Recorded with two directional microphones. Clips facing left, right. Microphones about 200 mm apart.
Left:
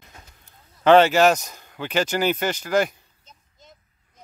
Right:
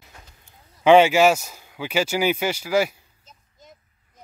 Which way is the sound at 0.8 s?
10° right (ahead or behind).